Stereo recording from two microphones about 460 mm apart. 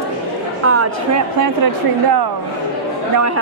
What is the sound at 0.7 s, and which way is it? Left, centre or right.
Speech, right.